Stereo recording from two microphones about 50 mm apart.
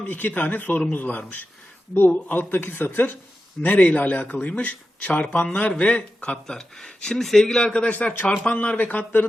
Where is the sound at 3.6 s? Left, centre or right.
Left.